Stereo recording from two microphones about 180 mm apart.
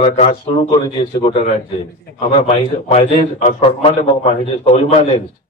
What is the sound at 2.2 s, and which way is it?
A man's voice, 30° left (ahead or behind).